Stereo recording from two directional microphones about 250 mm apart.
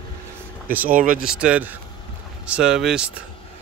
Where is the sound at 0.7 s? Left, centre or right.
Centre.